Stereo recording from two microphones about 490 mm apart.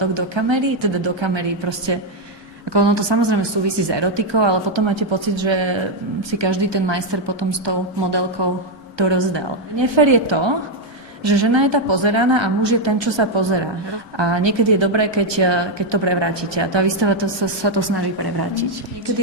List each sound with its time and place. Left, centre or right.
0.0 s a woman's voice: right